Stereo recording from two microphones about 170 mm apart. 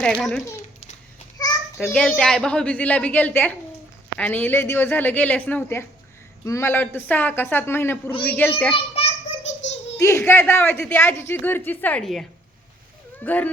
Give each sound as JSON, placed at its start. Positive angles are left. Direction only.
{"t": 0.0, "sound": "a child's voice", "side_deg": 0}
{"t": 1.4, "sound": "a sound", "side_deg": 20}
{"t": 1.8, "sound": "speech", "side_deg": 5}
{"t": 8.7, "sound": "a sound", "side_deg": 35}
{"t": 10.0, "sound": "speech", "side_deg": 15}
{"t": 13.2, "sound": "speech", "side_deg": 10}